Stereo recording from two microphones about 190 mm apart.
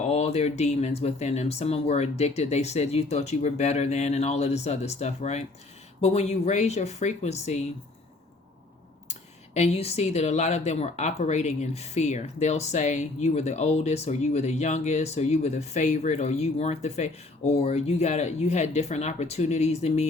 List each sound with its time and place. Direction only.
0.1 s speech: 35° left (ahead or behind)
9.6 s speech: 35° left (ahead or behind)